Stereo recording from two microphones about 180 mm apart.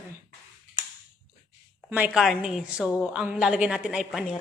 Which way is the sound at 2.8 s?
20° left (ahead or behind).